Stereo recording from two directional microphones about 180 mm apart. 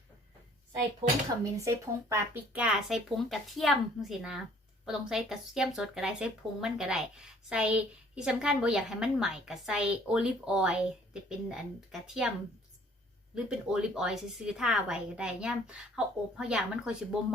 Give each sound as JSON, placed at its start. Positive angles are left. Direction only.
{"t": 1.5, "sound": "speech", "side_deg": -15}
{"t": 13.3, "sound": "speech", "side_deg": -5}